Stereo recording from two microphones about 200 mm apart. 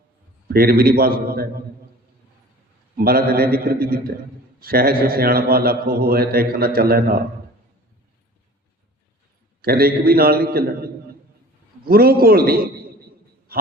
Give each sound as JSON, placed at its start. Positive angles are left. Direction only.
{"t": 0.4, "sound": "a man's voice", "side_deg": -50}
{"t": 3.0, "sound": "a man's voice", "side_deg": -50}
{"t": 9.6, "sound": "a man's voice", "side_deg": -50}
{"t": 11.9, "sound": "a man's voice", "side_deg": -50}